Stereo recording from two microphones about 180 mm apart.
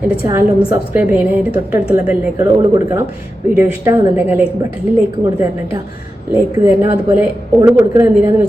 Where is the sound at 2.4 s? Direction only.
20° right (ahead or behind).